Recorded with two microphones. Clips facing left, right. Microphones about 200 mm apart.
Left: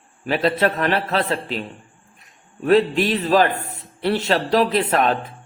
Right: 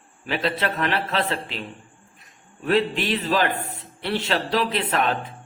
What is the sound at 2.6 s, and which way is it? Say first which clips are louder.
A man's voice: left 6 dB; 40° left (ahead or behind).